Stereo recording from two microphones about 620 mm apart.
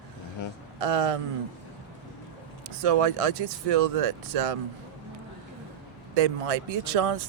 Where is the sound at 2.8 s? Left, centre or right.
Right.